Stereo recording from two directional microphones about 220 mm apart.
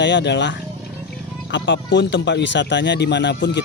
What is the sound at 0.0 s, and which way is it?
Speech, 55° left (ahead or behind).